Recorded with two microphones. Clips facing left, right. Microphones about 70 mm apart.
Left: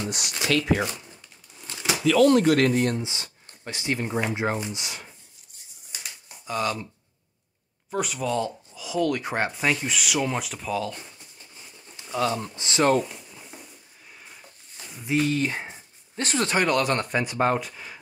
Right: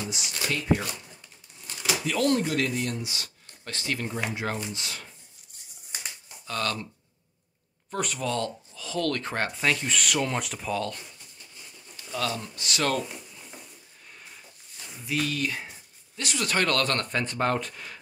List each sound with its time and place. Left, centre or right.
0.0 s speech: left
0.5 s speech: left
2.3 s speech: left
3.0 s speech: left
6.4 s speech: centre
7.9 s speech: centre
12.0 s speech: left
15.0 s speech: left
16.4 s speech: centre